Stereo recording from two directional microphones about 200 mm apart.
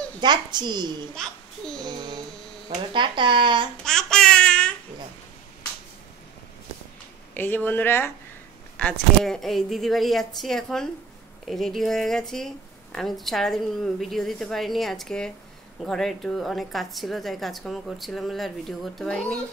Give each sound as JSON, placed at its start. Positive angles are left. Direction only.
{"t": 0.2, "sound": "speech", "side_deg": -20}
{"t": 1.8, "sound": "child singing", "side_deg": -20}
{"t": 2.9, "sound": "speech", "side_deg": -25}
{"t": 3.8, "sound": "babbling", "side_deg": 5}
{"t": 7.3, "sound": "speech", "side_deg": 10}